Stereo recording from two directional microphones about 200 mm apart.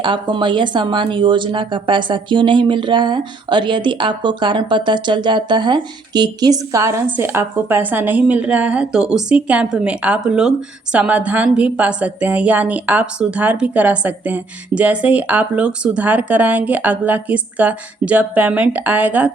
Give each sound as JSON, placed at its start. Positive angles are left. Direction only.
{"t": 0.0, "sound": "a woman's voice", "side_deg": -25}